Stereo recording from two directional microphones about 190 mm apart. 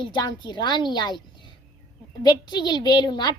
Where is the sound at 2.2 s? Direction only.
20° left (ahead or behind).